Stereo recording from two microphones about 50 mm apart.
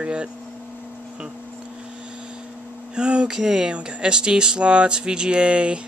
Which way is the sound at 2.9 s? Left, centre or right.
Centre.